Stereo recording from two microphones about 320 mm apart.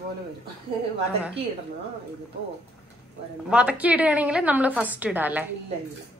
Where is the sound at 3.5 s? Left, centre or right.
Centre.